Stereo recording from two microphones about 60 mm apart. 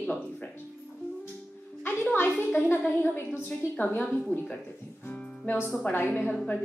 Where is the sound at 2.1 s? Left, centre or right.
Left.